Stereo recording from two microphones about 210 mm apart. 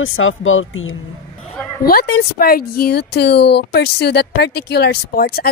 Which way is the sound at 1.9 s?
45° left (ahead or behind).